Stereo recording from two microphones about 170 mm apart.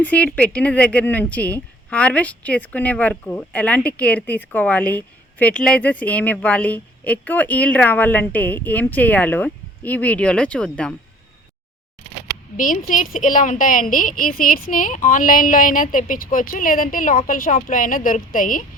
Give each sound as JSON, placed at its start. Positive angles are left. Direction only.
{"t": 0.0, "sound": "speech", "side_deg": 10}
{"t": 12.5, "sound": "a woman's voice", "side_deg": 50}